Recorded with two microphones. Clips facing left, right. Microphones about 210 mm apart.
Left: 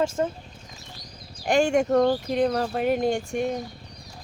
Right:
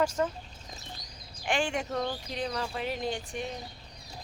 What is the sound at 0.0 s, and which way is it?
Speech, 25° left (ahead or behind).